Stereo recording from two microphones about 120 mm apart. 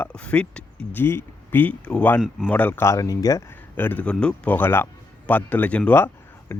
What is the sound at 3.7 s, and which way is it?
A man's voice, 15° left (ahead or behind).